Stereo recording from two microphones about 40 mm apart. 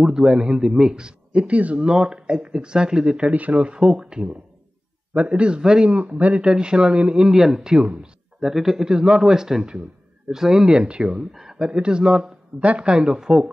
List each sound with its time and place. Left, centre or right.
0.0 s speech: centre
1.5 s speech: right
1.8 s speech: centre
3.3 s speech: right
3.8 s speech: centre
5.6 s speech: centre
5.9 s speech: right
6.4 s speech: right
9.0 s speech: right
9.3 s speech: centre
11.3 s speech: centre
11.6 s speech: right
12.5 s speech: right
12.8 s speech: right